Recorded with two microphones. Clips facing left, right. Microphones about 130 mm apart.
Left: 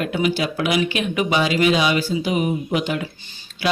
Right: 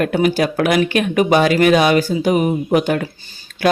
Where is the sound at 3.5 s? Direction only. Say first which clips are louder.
Right 6 dB; 50° right (ahead or behind).